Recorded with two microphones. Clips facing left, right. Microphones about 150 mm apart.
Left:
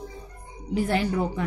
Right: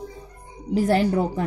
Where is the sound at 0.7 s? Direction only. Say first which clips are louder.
Right 5 dB; 40° right (ahead or behind).